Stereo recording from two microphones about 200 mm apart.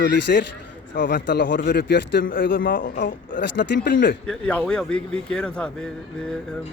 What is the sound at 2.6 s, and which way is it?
Speech, 45° left (ahead or behind).